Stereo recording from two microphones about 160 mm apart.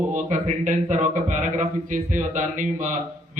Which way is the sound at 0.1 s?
50° right (ahead or behind).